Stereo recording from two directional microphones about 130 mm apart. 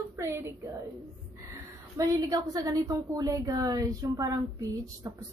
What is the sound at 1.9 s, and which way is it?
A woman's voice, 25° right (ahead or behind).